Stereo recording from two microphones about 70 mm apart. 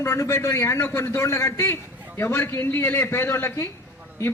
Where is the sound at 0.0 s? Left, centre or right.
Left.